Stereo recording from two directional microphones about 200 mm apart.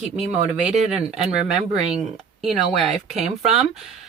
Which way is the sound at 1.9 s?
Centre (ahead or behind).